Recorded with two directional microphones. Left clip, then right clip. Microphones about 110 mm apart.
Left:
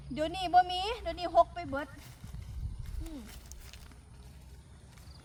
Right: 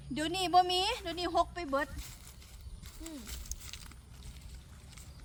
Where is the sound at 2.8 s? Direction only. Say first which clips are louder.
Right 1 dB; 25° right (ahead or behind).